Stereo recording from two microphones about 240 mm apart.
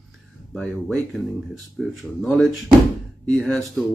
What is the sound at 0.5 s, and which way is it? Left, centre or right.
Speech, centre.